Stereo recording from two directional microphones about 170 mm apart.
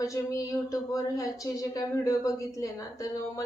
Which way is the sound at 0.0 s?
20° left (ahead or behind).